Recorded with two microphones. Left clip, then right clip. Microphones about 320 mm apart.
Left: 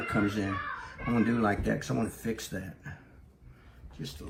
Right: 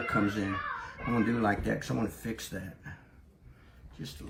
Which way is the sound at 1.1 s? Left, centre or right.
Centre.